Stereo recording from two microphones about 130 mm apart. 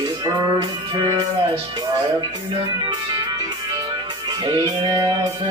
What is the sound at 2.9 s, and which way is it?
Music, 30° right (ahead or behind).